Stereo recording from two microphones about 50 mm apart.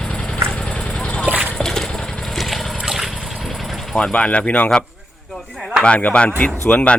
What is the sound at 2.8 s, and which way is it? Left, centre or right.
Water, centre.